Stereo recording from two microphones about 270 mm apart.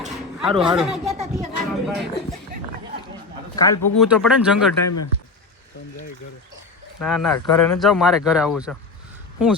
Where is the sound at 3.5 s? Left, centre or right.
Centre.